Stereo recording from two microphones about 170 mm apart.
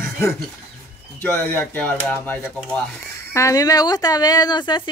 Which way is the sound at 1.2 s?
10° left (ahead or behind).